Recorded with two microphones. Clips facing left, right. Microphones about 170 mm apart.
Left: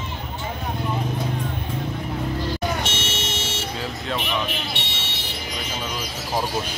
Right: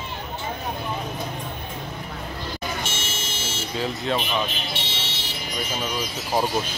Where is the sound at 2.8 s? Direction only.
80° left.